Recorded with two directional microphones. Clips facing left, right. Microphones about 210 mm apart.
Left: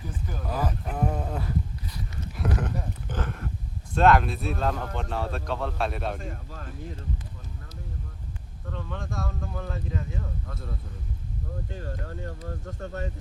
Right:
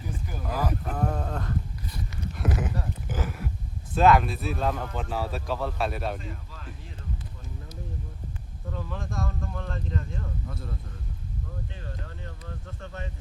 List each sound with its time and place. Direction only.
0.3 s a sound: 5° right (ahead or behind)
0.6 s speech: 5° left (ahead or behind)
2.3 s livestock: 5° right (ahead or behind)
3.1 s a sound: 5° right (ahead or behind)
3.9 s speech: centre (ahead or behind)
6.1 s speech: 45° left (ahead or behind)
8.7 s speech: 5° right (ahead or behind)
11.7 s speech: 45° left (ahead or behind)